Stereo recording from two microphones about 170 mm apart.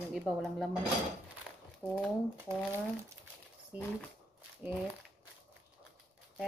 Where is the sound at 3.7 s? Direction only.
5° right (ahead or behind).